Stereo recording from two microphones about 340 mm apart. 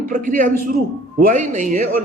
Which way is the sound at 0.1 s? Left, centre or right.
Right.